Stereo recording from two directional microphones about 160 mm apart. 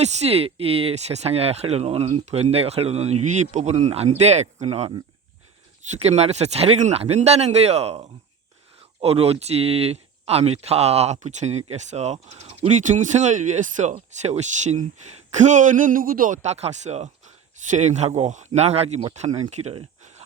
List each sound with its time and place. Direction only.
0.0 s speech: 40° right (ahead or behind)
6.0 s speech: 40° right (ahead or behind)